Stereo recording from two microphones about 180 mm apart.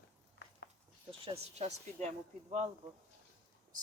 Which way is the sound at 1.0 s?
30° right (ahead or behind).